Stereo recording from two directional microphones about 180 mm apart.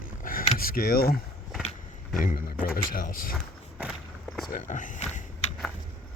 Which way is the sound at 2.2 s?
50° left (ahead or behind).